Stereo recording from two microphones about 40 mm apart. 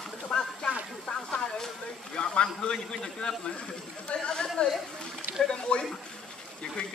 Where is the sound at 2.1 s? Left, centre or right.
Left.